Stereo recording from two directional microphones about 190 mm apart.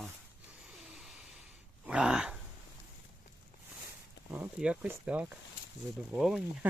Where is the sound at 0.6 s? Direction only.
Centre (ahead or behind).